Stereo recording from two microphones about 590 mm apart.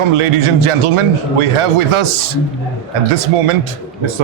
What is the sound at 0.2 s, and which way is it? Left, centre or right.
A man's voice, right.